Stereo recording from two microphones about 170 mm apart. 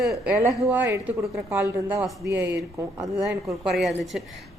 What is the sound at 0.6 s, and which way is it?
A woman's voice, 15° right (ahead or behind).